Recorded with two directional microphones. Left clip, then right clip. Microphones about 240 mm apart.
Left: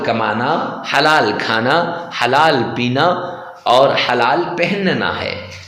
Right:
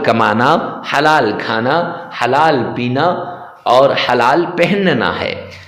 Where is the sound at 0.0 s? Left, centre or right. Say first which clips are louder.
Right 5 dB; right.